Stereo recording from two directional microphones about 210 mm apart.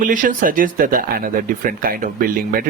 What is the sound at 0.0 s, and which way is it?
Speech, 40° right (ahead or behind).